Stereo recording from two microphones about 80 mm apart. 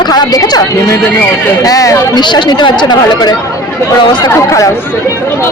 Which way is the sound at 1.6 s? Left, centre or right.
Left.